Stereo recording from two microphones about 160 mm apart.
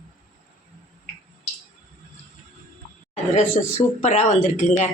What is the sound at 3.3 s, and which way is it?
Speech, 45° left (ahead or behind).